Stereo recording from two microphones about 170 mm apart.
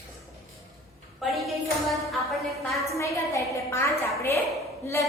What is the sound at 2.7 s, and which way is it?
A woman's voice, 15° left (ahead or behind).